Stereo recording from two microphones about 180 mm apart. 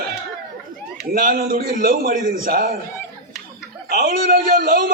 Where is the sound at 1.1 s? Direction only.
50° right (ahead or behind).